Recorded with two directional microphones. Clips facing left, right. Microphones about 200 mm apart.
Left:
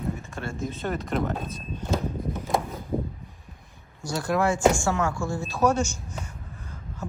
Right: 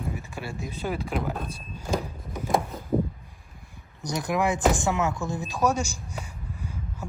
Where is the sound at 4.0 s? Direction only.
20° right (ahead or behind).